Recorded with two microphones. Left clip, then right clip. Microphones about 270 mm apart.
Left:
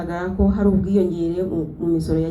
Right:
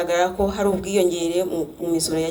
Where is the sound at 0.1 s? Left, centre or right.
Right.